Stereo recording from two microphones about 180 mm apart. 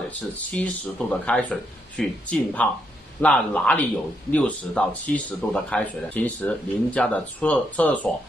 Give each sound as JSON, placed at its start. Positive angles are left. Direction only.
{"t": 0.1, "sound": "speech", "side_deg": 10}